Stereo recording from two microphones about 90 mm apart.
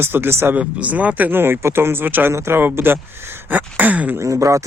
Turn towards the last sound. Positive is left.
turn(degrees=-35)  # may be behind; listen again after turning